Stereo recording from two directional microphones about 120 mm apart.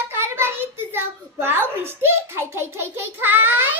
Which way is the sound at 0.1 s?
20° right (ahead or behind).